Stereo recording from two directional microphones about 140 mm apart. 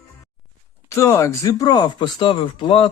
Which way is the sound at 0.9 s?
20° left (ahead or behind).